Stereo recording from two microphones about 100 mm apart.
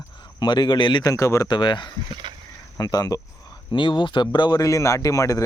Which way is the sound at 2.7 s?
40° left (ahead or behind).